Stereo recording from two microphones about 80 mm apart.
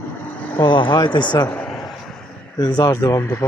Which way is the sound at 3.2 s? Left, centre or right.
Left.